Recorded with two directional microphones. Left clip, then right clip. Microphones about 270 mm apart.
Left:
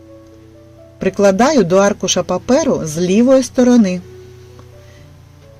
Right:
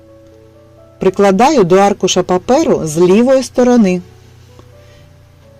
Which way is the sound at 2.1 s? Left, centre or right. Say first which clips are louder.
Right 3 dB; centre.